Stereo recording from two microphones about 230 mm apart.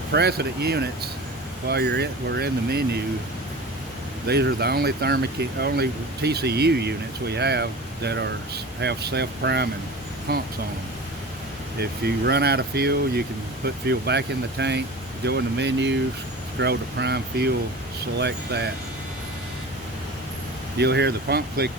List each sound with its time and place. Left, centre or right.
0.1 s speech: right
4.3 s speech: right
11.8 s speech: right
20.7 s speech: right